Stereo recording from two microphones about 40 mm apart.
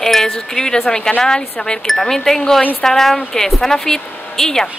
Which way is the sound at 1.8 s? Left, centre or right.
Centre.